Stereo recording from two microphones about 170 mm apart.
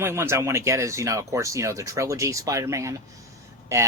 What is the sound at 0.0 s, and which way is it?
Speech, 15° right (ahead or behind).